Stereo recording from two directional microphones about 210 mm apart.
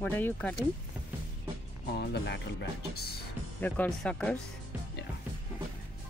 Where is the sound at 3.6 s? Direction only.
5° left (ahead or behind).